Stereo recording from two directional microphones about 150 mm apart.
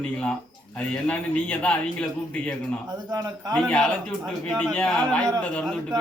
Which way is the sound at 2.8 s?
25° right (ahead or behind).